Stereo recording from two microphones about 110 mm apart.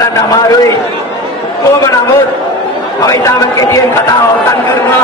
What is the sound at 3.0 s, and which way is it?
A man's voice, 30° left (ahead or behind).